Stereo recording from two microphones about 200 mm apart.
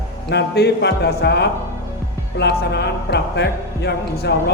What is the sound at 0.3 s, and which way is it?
Speech, 55° left (ahead or behind).